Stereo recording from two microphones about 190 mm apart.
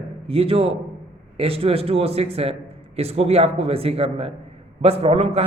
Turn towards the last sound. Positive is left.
turn(degrees=-35)  # may be behind; listen again after turning